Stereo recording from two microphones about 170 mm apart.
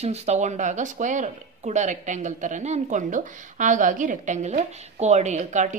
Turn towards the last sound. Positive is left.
turn(degrees=-45)  # may be behind; listen again after turning